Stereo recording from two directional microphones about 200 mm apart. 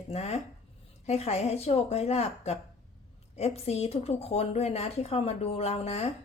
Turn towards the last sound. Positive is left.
turn(degrees=30)  # may be behind; listen again after turning